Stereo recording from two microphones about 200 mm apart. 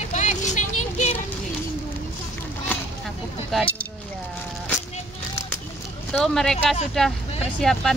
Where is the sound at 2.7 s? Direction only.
10° left (ahead or behind).